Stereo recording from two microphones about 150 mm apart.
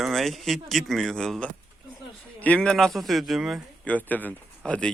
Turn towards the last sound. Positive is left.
turn(degrees=5)  # may be behind; listen again after turning